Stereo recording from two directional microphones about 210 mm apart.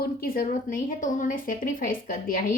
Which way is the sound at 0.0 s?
45° left (ahead or behind).